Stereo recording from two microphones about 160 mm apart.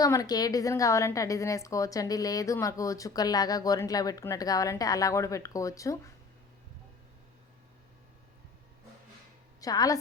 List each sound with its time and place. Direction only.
0.0 s a woman's voice: 20° left (ahead or behind)
9.6 s a woman's voice: 20° left (ahead or behind)